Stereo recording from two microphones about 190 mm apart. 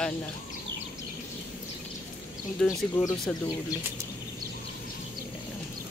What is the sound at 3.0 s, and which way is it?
Speech, 20° left (ahead or behind).